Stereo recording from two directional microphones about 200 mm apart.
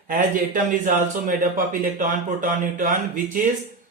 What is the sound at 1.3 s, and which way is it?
Speech, 45° right (ahead or behind).